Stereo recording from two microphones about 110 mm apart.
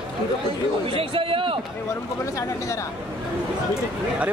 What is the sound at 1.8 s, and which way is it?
Speech, 30° left (ahead or behind).